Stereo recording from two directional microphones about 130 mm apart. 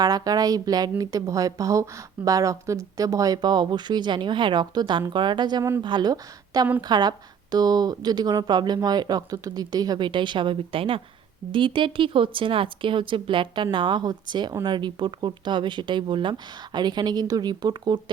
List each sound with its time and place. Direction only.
0.0 s speech: 30° right (ahead or behind)